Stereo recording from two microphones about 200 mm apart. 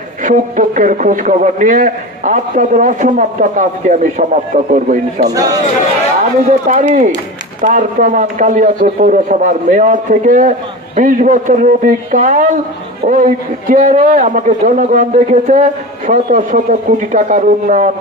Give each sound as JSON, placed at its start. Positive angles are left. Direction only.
{"t": 0.2, "sound": "a man's voice", "side_deg": -40}
{"t": 5.3, "sound": "speech", "side_deg": -20}
{"t": 6.5, "sound": "a man's voice", "side_deg": -40}